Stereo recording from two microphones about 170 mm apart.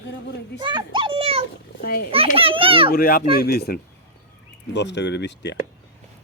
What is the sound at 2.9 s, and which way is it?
Speech, 60° left (ahead or behind).